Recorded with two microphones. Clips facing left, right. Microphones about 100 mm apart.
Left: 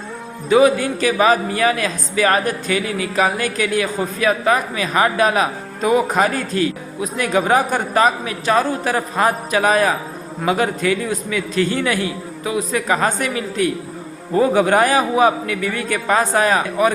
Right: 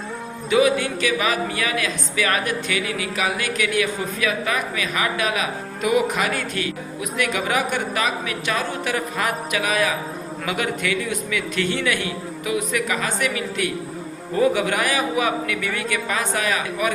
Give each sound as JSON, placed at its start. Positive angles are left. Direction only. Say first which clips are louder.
{"t": 0.5, "sound": "speech", "louder": "left 5 dB", "side_deg": 35}
{"t": 14.3, "sound": "speech", "louder": "left 5 dB", "side_deg": 35}